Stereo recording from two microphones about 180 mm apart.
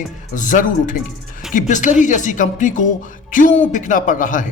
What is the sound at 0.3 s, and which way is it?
A man's voice, 45° left (ahead or behind).